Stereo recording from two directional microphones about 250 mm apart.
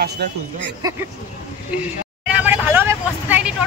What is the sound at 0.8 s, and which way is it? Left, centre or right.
Speech, centre.